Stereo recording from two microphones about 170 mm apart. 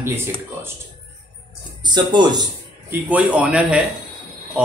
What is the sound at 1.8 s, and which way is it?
Speech, 25° right (ahead or behind).